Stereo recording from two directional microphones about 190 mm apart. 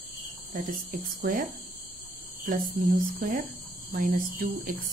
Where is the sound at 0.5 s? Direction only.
45° right (ahead or behind).